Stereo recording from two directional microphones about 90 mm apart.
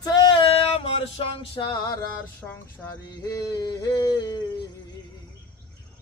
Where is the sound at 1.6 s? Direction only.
50° left (ahead or behind).